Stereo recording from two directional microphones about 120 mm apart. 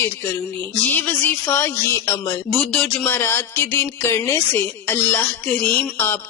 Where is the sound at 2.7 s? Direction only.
10° left (ahead or behind).